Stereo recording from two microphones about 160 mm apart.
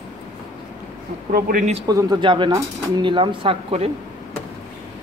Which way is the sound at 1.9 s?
25° right (ahead or behind).